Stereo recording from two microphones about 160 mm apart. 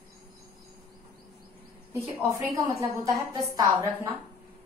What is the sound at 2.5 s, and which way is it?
A woman's voice, 20° right (ahead or behind).